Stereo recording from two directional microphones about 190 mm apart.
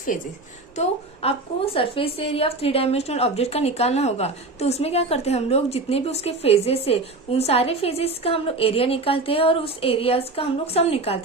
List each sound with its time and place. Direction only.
0.1 s a woman's voice: 45° left (ahead or behind)
0.8 s a woman's voice: 30° left (ahead or behind)